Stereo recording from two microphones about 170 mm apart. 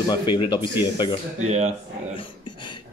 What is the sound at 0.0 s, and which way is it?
Speech, 25° left (ahead or behind).